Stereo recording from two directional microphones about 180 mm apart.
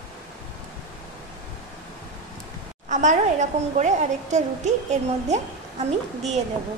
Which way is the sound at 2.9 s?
45° right (ahead or behind).